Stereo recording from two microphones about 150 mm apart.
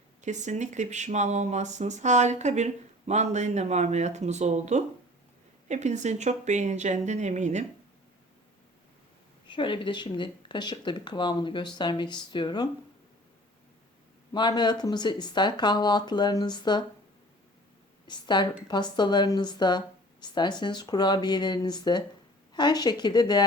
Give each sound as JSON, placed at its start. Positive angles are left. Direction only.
{"t": 0.2, "sound": "speech", "side_deg": -55}
{"t": 9.5, "sound": "speech", "side_deg": 35}
{"t": 14.3, "sound": "speech", "side_deg": 30}
{"t": 18.1, "sound": "speech", "side_deg": 30}